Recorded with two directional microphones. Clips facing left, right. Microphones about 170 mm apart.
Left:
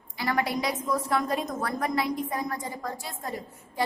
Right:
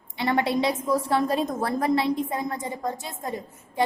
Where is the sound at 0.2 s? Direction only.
25° right (ahead or behind).